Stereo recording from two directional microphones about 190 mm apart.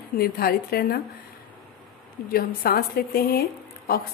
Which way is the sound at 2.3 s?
50° left (ahead or behind).